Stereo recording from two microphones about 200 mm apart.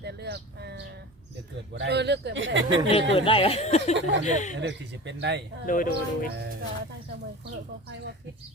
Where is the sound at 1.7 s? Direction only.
60° right (ahead or behind).